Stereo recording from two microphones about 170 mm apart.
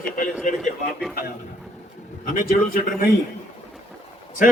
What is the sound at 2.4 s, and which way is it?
Speech, 55° left (ahead or behind).